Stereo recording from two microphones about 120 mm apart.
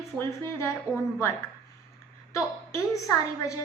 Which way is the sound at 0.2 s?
25° left (ahead or behind).